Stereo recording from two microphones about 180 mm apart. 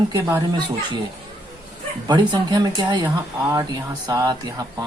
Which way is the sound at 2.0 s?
25° right (ahead or behind).